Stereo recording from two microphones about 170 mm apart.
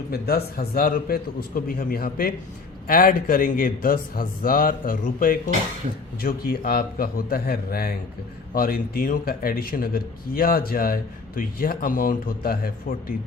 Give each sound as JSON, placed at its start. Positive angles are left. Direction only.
{"t": 0.1, "sound": "speech", "side_deg": 65}